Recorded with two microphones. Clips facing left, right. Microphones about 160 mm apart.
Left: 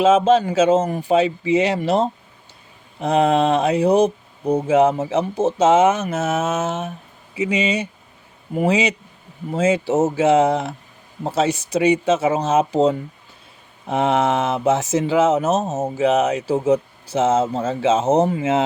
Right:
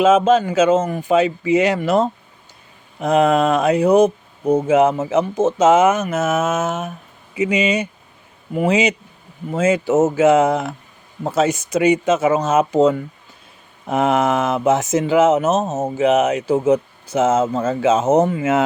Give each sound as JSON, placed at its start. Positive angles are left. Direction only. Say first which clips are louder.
{"t": 0.0, "sound": "speech", "louder": "right 1 dB", "side_deg": 35}
{"t": 13.9, "sound": "speech", "louder": "right 1 dB", "side_deg": 30}